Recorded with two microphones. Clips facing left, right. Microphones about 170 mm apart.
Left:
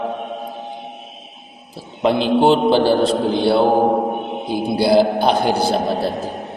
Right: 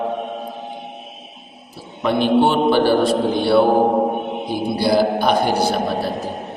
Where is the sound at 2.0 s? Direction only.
30° left (ahead or behind).